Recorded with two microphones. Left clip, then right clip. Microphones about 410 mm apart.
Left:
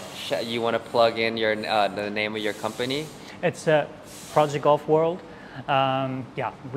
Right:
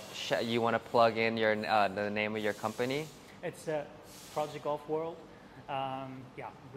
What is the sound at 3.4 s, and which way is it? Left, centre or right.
Speech, left.